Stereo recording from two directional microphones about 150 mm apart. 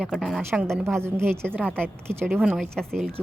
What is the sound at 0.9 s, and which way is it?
Speech, 15° right (ahead or behind).